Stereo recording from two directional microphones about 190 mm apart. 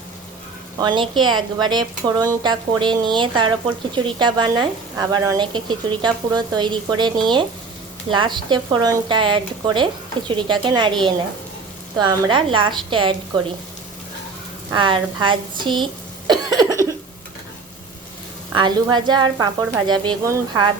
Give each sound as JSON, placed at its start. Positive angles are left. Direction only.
{"t": 0.8, "sound": "speech", "side_deg": -25}
{"t": 11.9, "sound": "speech", "side_deg": -25}
{"t": 14.7, "sound": "a woman's voice", "side_deg": -25}
{"t": 18.5, "sound": "speech", "side_deg": -25}